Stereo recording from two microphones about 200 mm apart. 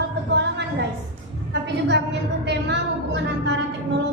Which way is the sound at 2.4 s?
60° right (ahead or behind).